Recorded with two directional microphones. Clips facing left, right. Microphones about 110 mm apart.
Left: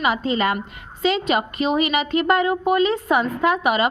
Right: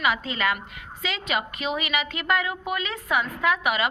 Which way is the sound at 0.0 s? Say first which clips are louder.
Left 5 dB; 30° left (ahead or behind).